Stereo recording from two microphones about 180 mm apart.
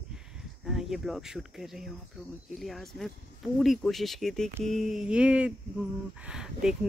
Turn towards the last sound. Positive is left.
turn(degrees=-5)  # may be behind; listen again after turning